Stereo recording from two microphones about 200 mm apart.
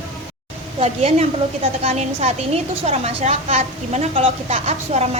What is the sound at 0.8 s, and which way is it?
A woman's voice, 30° right (ahead or behind).